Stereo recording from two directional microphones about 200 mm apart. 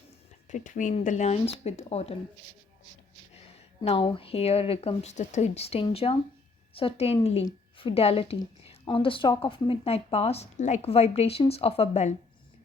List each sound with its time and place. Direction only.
0.4 s speech: 40° left (ahead or behind)
3.8 s speech: 30° left (ahead or behind)